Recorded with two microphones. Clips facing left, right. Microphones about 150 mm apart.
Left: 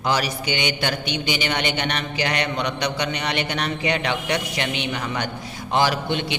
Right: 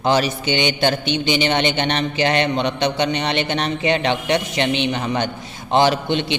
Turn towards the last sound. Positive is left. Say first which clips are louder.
# right 4 dB
turn(degrees=-25)  # may be behind; listen again after turning